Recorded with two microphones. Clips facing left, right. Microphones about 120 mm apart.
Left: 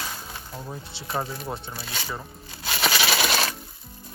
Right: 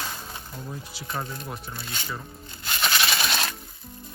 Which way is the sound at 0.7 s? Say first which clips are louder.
Even; 30° left (ahead or behind).